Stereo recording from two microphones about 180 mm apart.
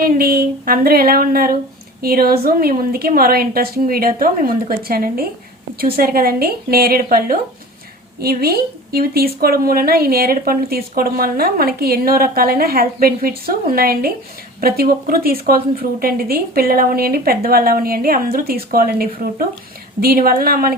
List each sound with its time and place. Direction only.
0.0 s speech: 55° right (ahead or behind)